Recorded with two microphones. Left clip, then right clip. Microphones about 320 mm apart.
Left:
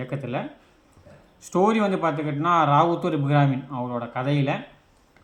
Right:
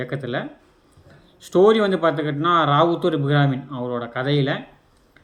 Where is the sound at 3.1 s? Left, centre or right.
Left.